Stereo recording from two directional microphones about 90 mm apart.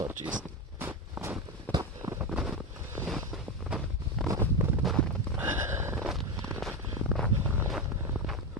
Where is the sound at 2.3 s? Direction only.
10° right (ahead or behind).